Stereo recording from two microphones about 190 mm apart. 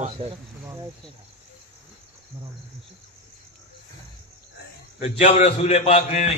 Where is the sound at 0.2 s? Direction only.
30° right (ahead or behind).